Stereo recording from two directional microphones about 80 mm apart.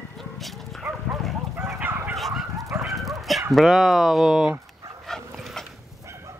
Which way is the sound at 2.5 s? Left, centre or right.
Right.